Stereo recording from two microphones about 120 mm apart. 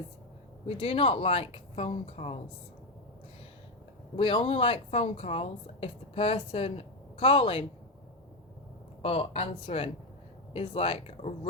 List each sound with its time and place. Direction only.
0.8 s a woman's voice: 50° left (ahead or behind)
4.2 s a woman's voice: 40° left (ahead or behind)
9.0 s a woman's voice: 55° left (ahead or behind)